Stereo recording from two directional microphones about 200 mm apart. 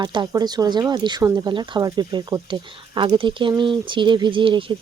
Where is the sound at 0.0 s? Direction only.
20° right (ahead or behind).